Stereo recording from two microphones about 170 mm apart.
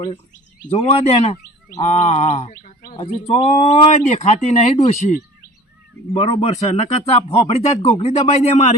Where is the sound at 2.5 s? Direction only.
50° left (ahead or behind).